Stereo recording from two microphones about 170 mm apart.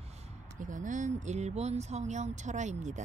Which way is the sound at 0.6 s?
50° right (ahead or behind).